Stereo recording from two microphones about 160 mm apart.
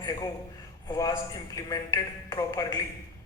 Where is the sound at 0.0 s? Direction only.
20° left (ahead or behind).